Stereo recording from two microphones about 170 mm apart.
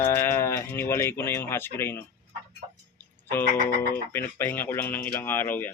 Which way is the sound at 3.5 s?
55° left (ahead or behind).